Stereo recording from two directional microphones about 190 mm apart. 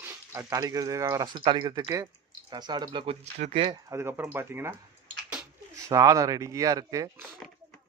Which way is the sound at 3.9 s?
10° right (ahead or behind).